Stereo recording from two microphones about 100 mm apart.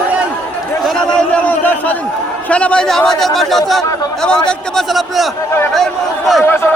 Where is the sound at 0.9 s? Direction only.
10° left (ahead or behind).